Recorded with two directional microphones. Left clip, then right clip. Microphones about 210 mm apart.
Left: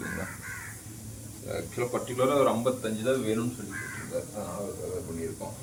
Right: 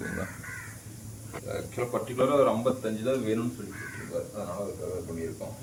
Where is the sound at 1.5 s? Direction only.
Centre (ahead or behind).